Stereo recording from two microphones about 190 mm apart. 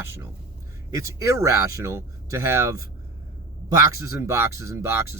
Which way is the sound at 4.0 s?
15° right (ahead or behind).